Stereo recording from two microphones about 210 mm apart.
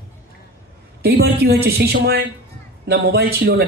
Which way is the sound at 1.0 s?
50° right (ahead or behind).